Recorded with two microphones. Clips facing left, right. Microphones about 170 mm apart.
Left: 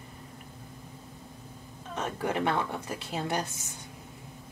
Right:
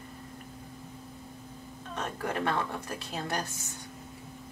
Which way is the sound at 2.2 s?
20° left (ahead or behind).